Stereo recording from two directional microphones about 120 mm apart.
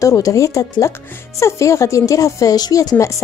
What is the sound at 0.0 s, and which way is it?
A woman's voice, 25° left (ahead or behind).